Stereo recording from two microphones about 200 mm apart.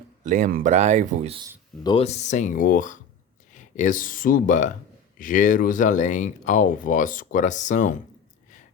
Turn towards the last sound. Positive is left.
turn(degrees=40)  # may be behind; listen again after turning